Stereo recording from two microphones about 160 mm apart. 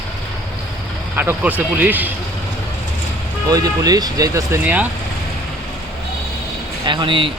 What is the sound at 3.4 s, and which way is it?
Speech, 25° right (ahead or behind).